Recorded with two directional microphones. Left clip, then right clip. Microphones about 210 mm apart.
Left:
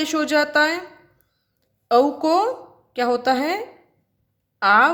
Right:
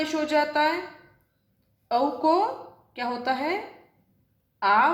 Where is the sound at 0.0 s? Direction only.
50° left (ahead or behind).